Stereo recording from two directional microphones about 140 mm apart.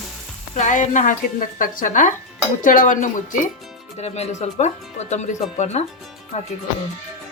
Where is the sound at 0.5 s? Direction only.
60° left (ahead or behind).